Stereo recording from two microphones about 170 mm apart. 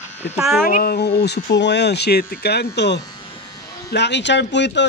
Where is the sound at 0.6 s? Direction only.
60° left (ahead or behind).